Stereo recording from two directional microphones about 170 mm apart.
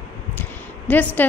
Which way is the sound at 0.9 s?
10° left (ahead or behind).